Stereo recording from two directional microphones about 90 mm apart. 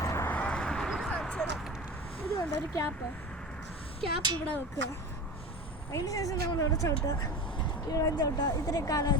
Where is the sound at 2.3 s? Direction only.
35° left (ahead or behind).